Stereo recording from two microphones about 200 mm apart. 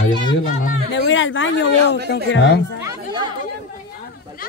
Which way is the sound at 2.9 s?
20° right (ahead or behind).